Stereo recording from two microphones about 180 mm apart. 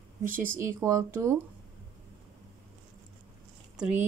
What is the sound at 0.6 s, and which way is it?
Speech, 15° right (ahead or behind).